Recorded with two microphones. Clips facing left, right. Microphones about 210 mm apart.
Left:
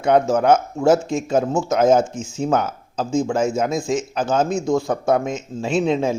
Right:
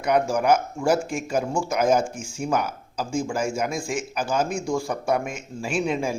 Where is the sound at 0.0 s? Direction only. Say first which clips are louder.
Left 5 dB; 25° left (ahead or behind).